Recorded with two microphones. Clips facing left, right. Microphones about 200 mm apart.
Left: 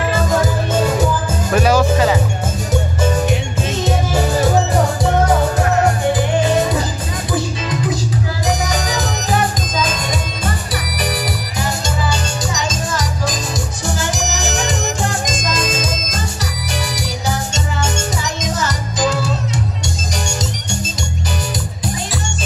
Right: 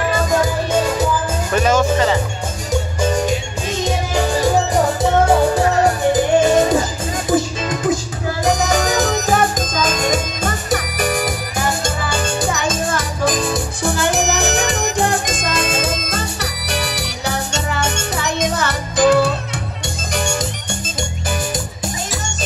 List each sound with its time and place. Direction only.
1.5 s music: 5° left (ahead or behind)
7.2 s music: 45° right (ahead or behind)